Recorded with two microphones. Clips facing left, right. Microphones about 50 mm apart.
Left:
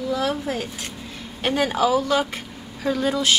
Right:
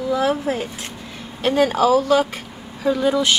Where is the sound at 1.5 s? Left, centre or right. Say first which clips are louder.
Right 4 dB; centre.